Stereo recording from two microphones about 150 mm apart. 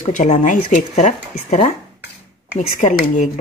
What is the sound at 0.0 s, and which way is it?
Speech, 55° left (ahead or behind).